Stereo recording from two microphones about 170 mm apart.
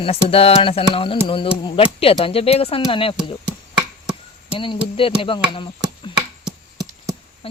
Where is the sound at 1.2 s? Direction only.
30° left (ahead or behind).